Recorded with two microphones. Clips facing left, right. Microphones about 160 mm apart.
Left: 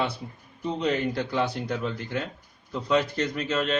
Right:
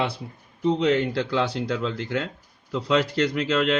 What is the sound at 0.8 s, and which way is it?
Speech, 90° right.